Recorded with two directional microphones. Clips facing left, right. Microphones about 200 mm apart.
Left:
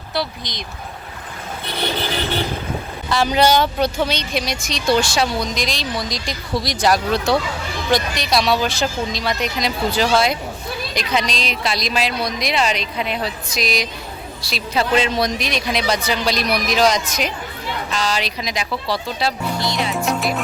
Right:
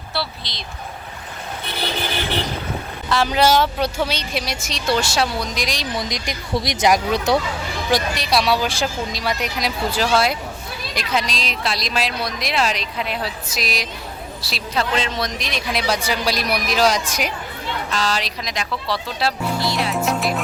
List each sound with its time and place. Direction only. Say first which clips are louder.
0.1 s speech: left 3 dB; 15° left (ahead or behind)
3.1 s a woman's voice: left 1 dB; centre (ahead or behind)
14.9 s a woman's voice: left 5 dB; 10° left (ahead or behind)